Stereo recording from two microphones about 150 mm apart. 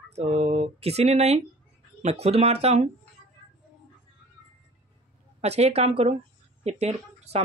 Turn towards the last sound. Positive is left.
turn(degrees=-45)  # may be behind; listen again after turning